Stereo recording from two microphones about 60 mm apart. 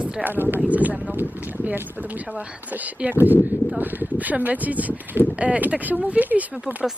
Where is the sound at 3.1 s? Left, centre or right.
Right.